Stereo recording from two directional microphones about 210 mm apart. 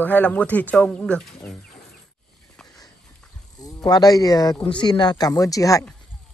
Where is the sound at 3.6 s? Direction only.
20° left (ahead or behind).